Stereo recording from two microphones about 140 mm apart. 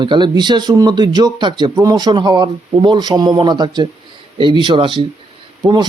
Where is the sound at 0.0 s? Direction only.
35° right (ahead or behind).